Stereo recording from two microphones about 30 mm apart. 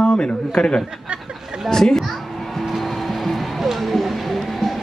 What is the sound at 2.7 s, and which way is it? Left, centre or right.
Music, centre.